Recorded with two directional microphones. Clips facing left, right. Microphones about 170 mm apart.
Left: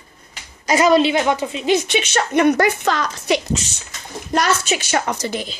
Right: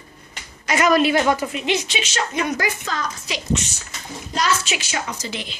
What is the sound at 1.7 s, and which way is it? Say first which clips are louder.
A woman's voice: left 8 dB; 60° left (ahead or behind).